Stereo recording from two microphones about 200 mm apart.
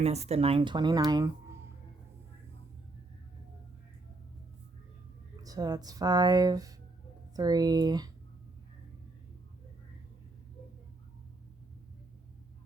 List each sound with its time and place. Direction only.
0.0 s speech: 30° right (ahead or behind)
5.4 s speech: 20° right (ahead or behind)